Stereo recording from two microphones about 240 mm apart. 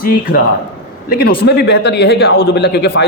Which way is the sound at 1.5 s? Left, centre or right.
Left.